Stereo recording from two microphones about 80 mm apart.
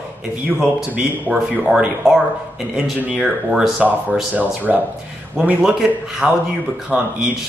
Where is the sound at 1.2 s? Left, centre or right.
Centre.